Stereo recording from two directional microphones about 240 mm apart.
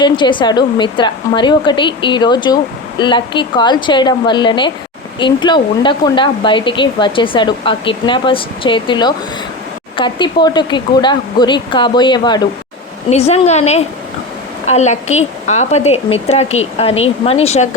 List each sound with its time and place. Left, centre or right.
0.0 s speech: centre